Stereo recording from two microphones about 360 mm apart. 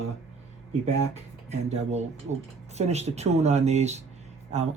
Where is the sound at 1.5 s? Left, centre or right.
Centre.